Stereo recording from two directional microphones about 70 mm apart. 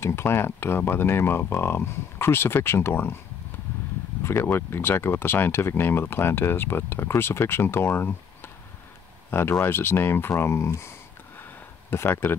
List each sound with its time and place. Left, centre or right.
0.0 s speech: left
4.2 s speech: left
9.3 s speech: left
11.9 s speech: left